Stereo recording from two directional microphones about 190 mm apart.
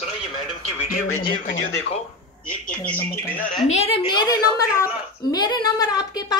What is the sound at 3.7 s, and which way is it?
A woman's voice, 30° left (ahead or behind).